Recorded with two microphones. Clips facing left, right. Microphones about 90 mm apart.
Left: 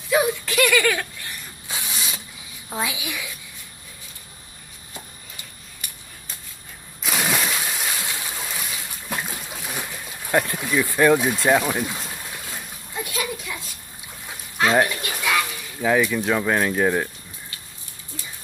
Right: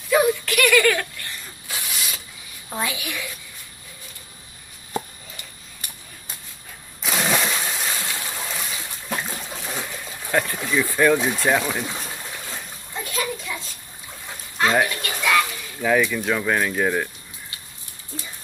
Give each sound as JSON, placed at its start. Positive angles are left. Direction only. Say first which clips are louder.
{"t": 0.1, "sound": "a sound", "louder": "right 2 dB", "side_deg": 15}
{"t": 2.7, "sound": "speech", "louder": "even", "side_deg": 10}
{"t": 7.0, "sound": "splash", "louder": "right 2 dB", "side_deg": 0}
{"t": 10.3, "sound": "speech", "louder": "left 1 dB", "side_deg": 10}
{"t": 12.2, "sound": "splash", "louder": "right 1 dB", "side_deg": 5}
{"t": 14.6, "sound": "a sound", "louder": "left 1 dB", "side_deg": 5}
{"t": 16.0, "sound": "speech", "louder": "left 1 dB", "side_deg": 5}